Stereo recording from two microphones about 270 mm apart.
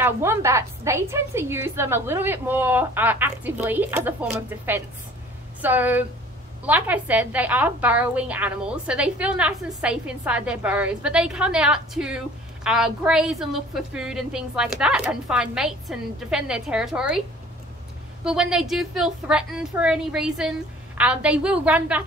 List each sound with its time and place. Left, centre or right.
0.0 s a woman's voice: centre
18.2 s a woman's voice: centre